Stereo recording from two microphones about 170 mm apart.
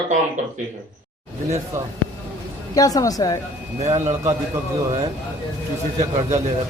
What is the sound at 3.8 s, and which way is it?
Speech, 40° right (ahead or behind).